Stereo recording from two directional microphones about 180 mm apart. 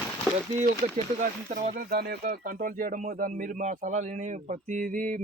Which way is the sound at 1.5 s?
55° right (ahead or behind).